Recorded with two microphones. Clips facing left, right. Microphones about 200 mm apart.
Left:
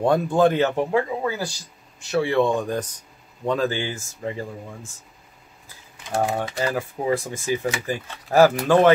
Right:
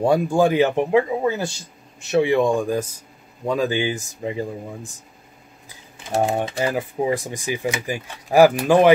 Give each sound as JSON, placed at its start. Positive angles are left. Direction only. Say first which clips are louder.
{"t": 0.0, "sound": "speech", "louder": "right 1 dB", "side_deg": -10}
{"t": 6.0, "sound": "speech", "louder": "right 3 dB", "side_deg": -25}